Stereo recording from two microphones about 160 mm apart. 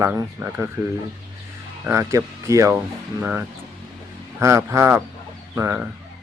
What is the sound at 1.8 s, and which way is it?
Speech, 15° right (ahead or behind).